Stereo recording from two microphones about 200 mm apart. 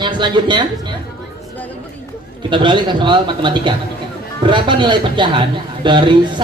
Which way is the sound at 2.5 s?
25° right (ahead or behind).